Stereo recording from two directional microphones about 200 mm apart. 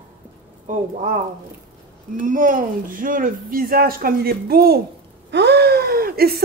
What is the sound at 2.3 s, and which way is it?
Speech, 40° right (ahead or behind).